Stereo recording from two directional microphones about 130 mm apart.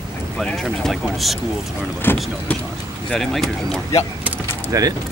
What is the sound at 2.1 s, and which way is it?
Speech, 15° left (ahead or behind).